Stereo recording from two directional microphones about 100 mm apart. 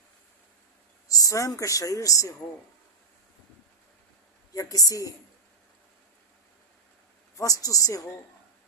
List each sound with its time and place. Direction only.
1.0 s speech: 35° left (ahead or behind)
4.5 s speech: 40° left (ahead or behind)
7.3 s speech: 35° left (ahead or behind)